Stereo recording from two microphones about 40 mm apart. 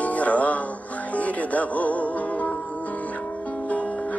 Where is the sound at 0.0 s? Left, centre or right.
Left.